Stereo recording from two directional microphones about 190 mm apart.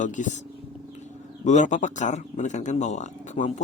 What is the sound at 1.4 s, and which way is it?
Speech, 40° left (ahead or behind).